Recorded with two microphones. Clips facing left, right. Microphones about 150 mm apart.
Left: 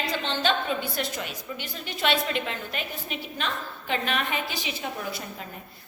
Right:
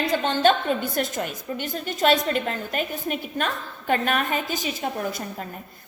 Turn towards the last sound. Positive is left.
turn(degrees=-45)  # may be behind; listen again after turning